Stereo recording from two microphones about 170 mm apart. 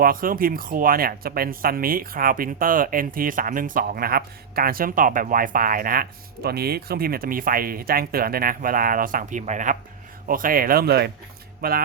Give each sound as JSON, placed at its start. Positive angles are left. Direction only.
{"t": 0.0, "sound": "speech", "side_deg": -55}